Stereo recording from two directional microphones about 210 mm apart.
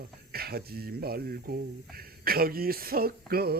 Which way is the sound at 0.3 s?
45° right (ahead or behind).